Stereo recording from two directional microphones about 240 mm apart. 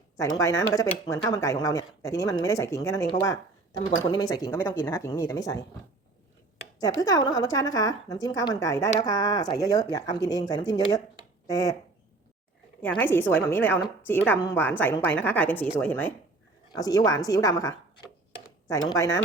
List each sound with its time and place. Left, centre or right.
0.2 s speech: centre
6.7 s speech: centre
12.8 s speech: centre